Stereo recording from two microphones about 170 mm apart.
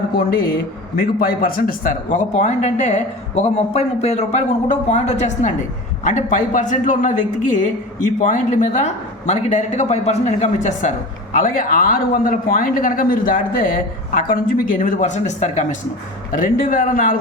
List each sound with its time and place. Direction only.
1.2 s a man's voice: 60° left (ahead or behind)